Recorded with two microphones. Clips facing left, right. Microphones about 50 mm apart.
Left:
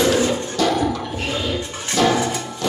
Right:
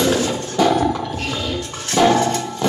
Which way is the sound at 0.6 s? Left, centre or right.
Centre.